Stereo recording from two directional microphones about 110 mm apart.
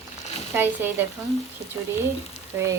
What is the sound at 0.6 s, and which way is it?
Speech, 20° right (ahead or behind).